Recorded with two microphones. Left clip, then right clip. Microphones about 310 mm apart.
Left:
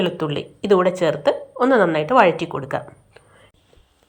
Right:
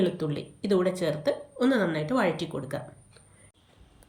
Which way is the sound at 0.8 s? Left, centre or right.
Centre.